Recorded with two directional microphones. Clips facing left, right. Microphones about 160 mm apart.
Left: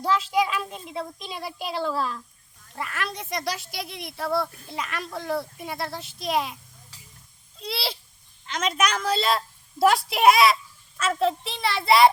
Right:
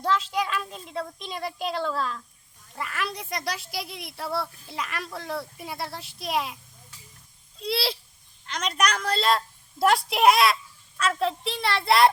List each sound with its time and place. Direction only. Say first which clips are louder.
0.0 s speech: left 3 dB; 5° left (ahead or behind)
7.6 s a woman's voice: right 4 dB; centre (ahead or behind)